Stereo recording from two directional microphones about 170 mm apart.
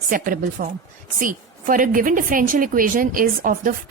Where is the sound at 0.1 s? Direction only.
55° right (ahead or behind).